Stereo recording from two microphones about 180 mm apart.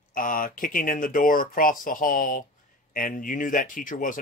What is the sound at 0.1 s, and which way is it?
Speech, 50° left (ahead or behind).